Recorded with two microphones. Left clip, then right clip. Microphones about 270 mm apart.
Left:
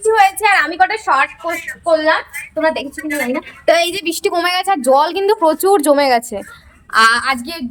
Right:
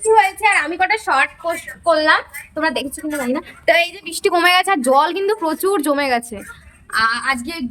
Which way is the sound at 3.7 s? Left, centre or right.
Centre.